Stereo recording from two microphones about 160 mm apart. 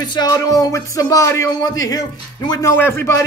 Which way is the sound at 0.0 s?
25° left (ahead or behind).